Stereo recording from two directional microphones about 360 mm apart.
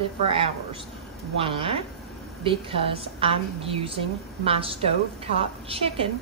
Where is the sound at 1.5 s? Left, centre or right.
Centre.